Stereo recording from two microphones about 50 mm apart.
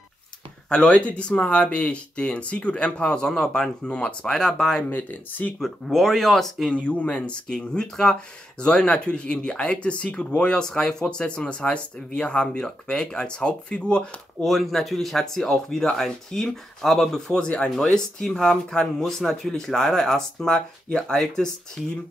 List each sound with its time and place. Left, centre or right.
0.7 s speech: left
4.3 s speech: centre
4.8 s speech: left
5.6 s speech: centre
6.7 s speech: left
14.4 s speech: centre
17.4 s speech: centre